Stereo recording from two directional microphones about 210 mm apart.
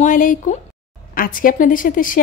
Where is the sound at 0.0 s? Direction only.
40° left (ahead or behind).